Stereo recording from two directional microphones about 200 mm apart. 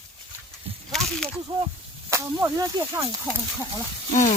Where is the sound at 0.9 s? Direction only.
Centre (ahead or behind).